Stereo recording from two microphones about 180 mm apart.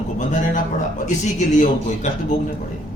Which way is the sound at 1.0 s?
45° left (ahead or behind).